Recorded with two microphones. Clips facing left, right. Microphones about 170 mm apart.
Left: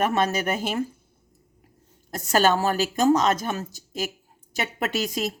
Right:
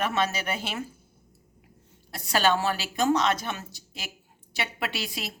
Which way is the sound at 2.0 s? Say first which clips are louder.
Left 4 dB; 45° left (ahead or behind).